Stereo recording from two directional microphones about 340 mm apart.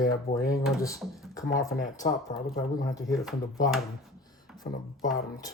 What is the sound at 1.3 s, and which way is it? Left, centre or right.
Speech, centre.